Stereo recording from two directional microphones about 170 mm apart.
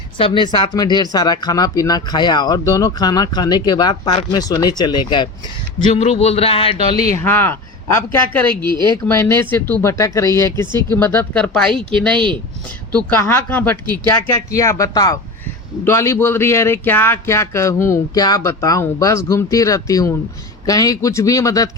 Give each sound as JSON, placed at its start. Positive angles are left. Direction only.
{"t": 0.2, "sound": "speech", "side_deg": 30}
{"t": 6.7, "sound": "a sound", "side_deg": -40}
{"t": 7.1, "sound": "speech", "side_deg": 15}
{"t": 13.1, "sound": "speech", "side_deg": 15}